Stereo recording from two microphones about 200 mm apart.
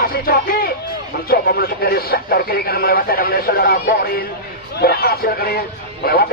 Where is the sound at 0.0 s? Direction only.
50° left (ahead or behind).